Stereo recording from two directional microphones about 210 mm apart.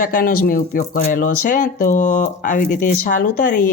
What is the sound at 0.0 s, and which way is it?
Speech, 40° left (ahead or behind).